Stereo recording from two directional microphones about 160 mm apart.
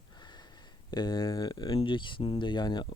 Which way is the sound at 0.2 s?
25° left (ahead or behind).